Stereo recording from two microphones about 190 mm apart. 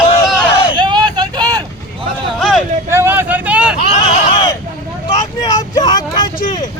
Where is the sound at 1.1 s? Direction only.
20° right (ahead or behind).